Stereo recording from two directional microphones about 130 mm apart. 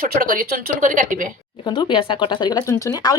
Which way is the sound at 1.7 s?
35° left (ahead or behind).